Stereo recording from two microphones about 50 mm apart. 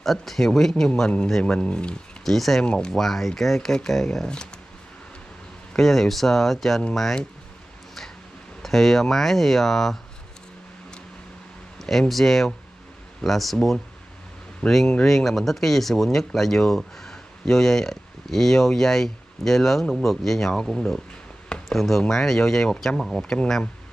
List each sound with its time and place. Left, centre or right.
0.0 s speech: centre
1.4 s speech: left
2.2 s speech: centre
2.6 s speech: centre
2.9 s speech: centre
5.7 s speech: centre
8.6 s speech: centre
12.1 s speech: centre